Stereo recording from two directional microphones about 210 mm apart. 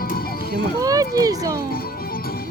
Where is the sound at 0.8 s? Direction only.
15° right (ahead or behind).